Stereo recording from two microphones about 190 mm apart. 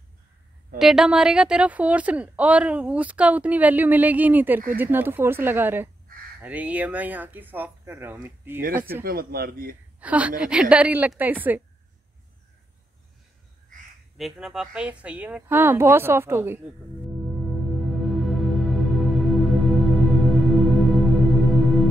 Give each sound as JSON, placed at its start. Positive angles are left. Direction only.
{"t": 0.7, "sound": "a woman's voice", "side_deg": 0}
{"t": 9.0, "sound": "a man's voice", "side_deg": -50}
{"t": 9.9, "sound": "a woman's voice", "side_deg": -5}
{"t": 14.1, "sound": "a woman's voice", "side_deg": 0}
{"t": 17.0, "sound": "music", "side_deg": 0}